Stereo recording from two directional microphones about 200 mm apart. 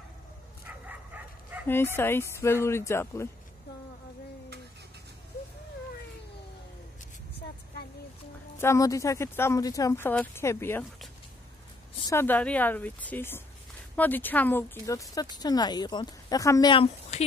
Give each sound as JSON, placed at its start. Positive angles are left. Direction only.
{"t": 0.8, "sound": "bow-wow", "side_deg": -10}
{"t": 2.0, "sound": "speech", "side_deg": 10}
{"t": 8.5, "sound": "speech", "side_deg": 15}
{"t": 12.1, "sound": "speech", "side_deg": 10}